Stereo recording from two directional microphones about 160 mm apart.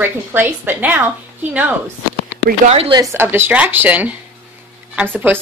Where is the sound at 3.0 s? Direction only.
15° right (ahead or behind).